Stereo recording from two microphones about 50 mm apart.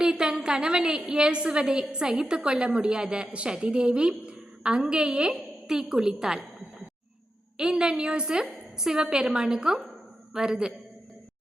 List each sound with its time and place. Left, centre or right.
0.0 s a woman's voice: centre
7.5 s a woman's voice: centre